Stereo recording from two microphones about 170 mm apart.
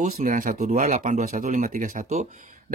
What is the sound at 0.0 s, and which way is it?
Speech, 50° right (ahead or behind).